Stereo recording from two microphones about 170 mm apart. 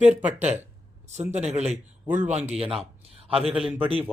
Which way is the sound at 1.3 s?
40° right (ahead or behind).